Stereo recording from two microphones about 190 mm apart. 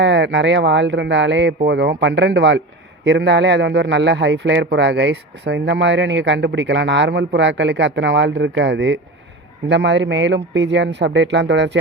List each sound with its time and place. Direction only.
0.0 s a man's voice: 70° right (ahead or behind)